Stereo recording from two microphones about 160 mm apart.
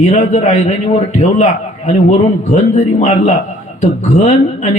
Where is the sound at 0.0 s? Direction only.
45° left (ahead or behind).